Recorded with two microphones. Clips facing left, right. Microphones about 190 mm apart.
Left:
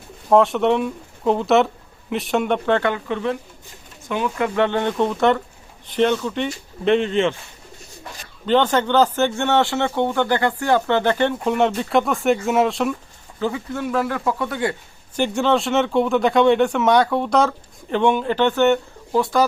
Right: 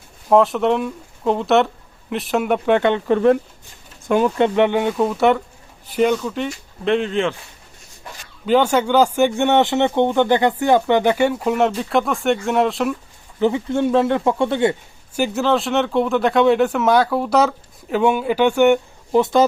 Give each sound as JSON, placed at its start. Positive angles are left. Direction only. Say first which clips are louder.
{"t": 0.3, "sound": "speech", "louder": "right 1 dB", "side_deg": 0}
{"t": 3.1, "sound": "speech", "louder": "right 9 dB", "side_deg": -50}
{"t": 4.4, "sound": "speech", "louder": "right 5 dB", "side_deg": -25}
{"t": 4.6, "sound": "speech", "louder": "right 2 dB", "side_deg": -10}
{"t": 8.4, "sound": "speech", "louder": "right 2 dB", "side_deg": -10}
{"t": 13.4, "sound": "speech", "louder": "right 6 dB", "side_deg": -25}
{"t": 15.1, "sound": "speech", "louder": "even", "side_deg": -5}